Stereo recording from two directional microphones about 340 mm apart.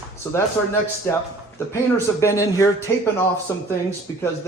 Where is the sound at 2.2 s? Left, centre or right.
Centre.